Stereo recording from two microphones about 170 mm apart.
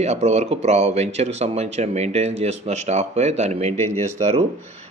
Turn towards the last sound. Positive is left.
turn(degrees=-40)  # may be behind; listen again after turning